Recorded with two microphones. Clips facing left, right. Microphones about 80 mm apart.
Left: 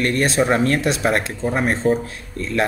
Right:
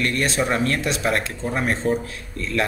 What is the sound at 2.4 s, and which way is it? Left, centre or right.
Speech, left.